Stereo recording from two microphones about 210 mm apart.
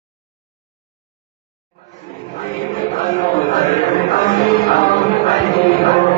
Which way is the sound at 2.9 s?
30° left (ahead or behind).